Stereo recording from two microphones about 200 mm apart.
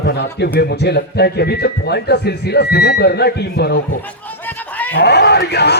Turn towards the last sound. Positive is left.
turn(degrees=55)  # may be behind; listen again after turning